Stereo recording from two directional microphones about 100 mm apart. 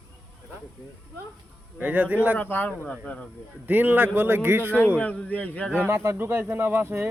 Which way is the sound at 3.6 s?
20° right (ahead or behind).